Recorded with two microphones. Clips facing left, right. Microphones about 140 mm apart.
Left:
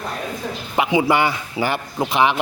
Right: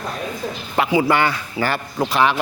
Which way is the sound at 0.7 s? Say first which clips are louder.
Even; 15° left (ahead or behind).